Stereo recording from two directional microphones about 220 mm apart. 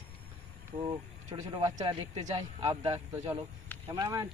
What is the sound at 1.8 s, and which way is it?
Speech, 20° right (ahead or behind).